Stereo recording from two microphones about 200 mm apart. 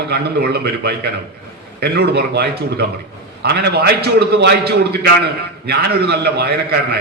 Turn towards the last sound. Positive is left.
turn(degrees=-50)  # may be behind; listen again after turning